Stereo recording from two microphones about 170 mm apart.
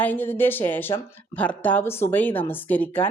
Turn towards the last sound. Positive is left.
turn(degrees=10)  # may be behind; listen again after turning